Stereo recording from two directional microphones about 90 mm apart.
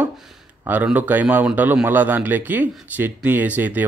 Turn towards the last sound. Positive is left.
turn(degrees=-20)  # may be behind; listen again after turning